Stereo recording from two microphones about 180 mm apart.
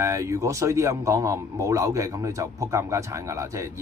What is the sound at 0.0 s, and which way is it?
Speech, 15° right (ahead or behind).